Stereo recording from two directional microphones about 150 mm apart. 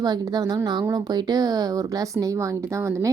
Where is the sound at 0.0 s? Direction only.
25° right (ahead or behind).